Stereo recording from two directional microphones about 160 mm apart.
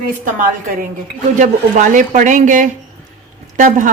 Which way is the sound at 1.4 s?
50° right (ahead or behind).